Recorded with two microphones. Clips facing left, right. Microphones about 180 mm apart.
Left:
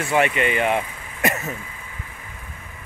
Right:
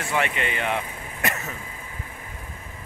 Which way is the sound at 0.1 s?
10° left (ahead or behind).